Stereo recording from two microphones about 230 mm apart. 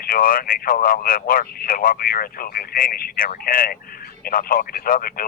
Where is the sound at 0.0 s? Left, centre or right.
Left.